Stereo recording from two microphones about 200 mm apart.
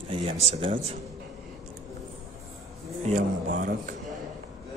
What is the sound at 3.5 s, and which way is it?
Speech, 45° right (ahead or behind).